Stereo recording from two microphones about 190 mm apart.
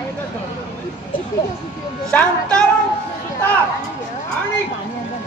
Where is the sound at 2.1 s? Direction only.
5° left (ahead or behind).